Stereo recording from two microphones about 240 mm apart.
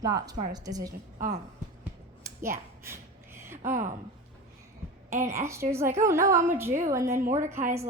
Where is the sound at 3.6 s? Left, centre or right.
Right.